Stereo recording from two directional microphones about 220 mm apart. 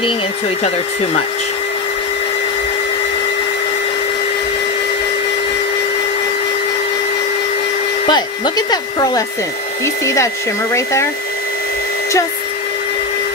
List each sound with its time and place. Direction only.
8.1 s speech: 20° left (ahead or behind)